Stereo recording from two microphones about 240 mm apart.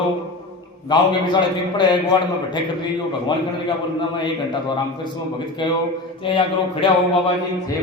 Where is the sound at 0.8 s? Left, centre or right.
Centre.